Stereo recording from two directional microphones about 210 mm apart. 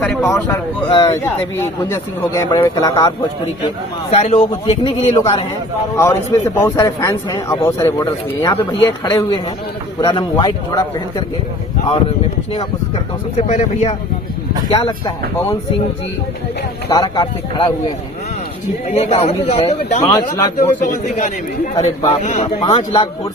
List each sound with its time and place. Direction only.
0.0 s speech: 10° left (ahead or behind)
2.3 s a man's voice: 15° left (ahead or behind)
4.1 s a man's voice: 30° left (ahead or behind)
13.5 s a man's voice: 30° left (ahead or behind)
16.9 s a man's voice: 20° left (ahead or behind)
18.9 s a man's voice: 30° left (ahead or behind)
20.0 s speech: 15° left (ahead or behind)
20.6 s a man's voice: 35° left (ahead or behind)